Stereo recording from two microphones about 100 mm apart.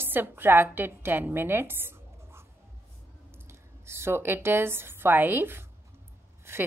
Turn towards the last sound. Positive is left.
turn(degrees=-25)  # may be behind; listen again after turning